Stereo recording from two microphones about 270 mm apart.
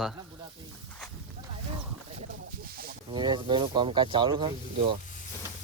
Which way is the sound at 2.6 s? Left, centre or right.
Right.